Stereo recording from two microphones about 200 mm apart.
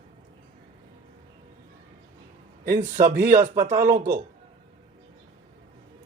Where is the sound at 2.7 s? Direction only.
40° right (ahead or behind).